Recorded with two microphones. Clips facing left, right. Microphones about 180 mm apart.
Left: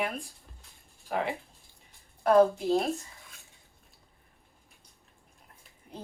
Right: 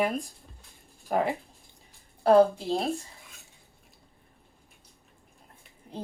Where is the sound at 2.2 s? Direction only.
30° right (ahead or behind).